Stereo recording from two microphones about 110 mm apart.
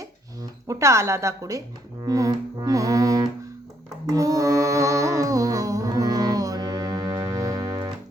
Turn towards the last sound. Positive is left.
turn(degrees=-35)  # may be behind; listen again after turning